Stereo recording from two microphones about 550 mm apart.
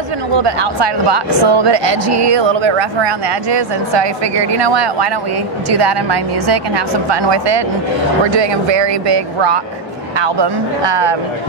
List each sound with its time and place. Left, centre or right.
0.4 s a woman's voice: right